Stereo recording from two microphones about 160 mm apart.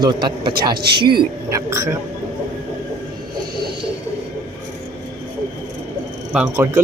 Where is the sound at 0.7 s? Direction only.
85° right.